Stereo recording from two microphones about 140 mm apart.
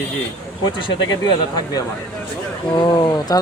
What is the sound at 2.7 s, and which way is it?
Speech, 35° left (ahead or behind).